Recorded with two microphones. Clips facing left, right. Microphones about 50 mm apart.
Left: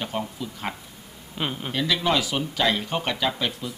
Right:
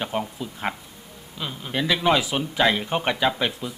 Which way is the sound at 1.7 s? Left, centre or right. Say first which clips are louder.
Right 3 dB; centre.